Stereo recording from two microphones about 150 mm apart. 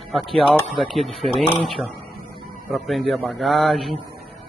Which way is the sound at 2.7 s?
Centre (ahead or behind).